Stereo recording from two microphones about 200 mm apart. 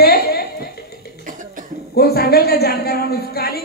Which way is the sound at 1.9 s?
50° left (ahead or behind).